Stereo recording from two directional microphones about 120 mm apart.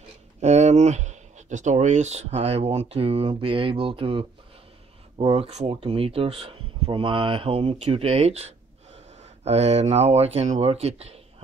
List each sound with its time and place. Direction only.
0.4 s speech: 70° right (ahead or behind)
5.8 s speech: 45° right (ahead or behind)